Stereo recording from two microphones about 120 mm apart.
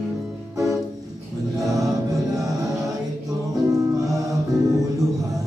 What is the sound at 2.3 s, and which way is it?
Music, 30° right (ahead or behind).